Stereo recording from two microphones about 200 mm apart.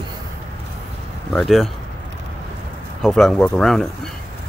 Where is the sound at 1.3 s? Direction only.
Centre (ahead or behind).